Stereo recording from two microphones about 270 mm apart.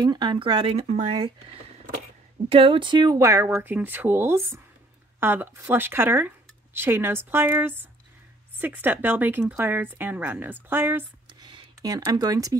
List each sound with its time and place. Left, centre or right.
0.0 s speech: centre